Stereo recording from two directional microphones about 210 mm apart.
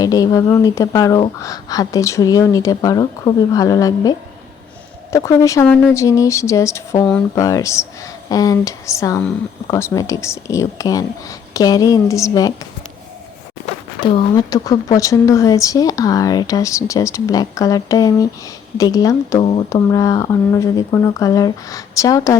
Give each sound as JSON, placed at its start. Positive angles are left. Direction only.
{"t": 0.0, "sound": "speech", "side_deg": 15}
{"t": 5.1, "sound": "speech", "side_deg": 15}
{"t": 14.0, "sound": "speech", "side_deg": 25}